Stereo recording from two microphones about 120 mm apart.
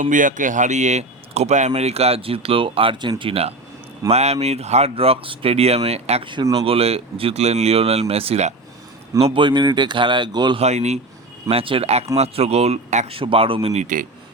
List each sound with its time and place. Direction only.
0.0 s speech: 90° right; by 3.5 s 50° right (ahead or behind)
4.1 s speech: 65° right (ahead or behind)
9.1 s speech: 50° right (ahead or behind)
10.6 s speech: 70° right (ahead or behind)
11.4 s speech: 50° right (ahead or behind); by 13.1 s 70° right (ahead or behind)
13.1 s a man's voice: 50° right (ahead or behind); by 14.1 s 90° right